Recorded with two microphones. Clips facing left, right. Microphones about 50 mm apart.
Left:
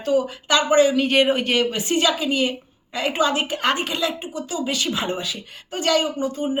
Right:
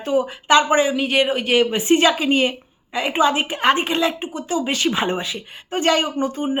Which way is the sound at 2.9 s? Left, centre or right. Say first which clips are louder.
Right 3 dB; right.